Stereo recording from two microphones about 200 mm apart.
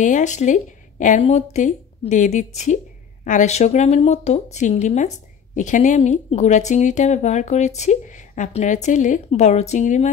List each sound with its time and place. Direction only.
0.0 s speech: 35° left (ahead or behind)